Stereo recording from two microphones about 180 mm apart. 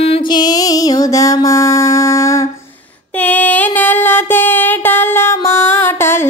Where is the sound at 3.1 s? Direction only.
10° left (ahead or behind).